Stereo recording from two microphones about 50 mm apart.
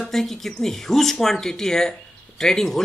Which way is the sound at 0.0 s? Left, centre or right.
Centre.